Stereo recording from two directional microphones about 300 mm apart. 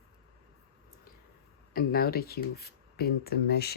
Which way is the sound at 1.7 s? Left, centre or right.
Left.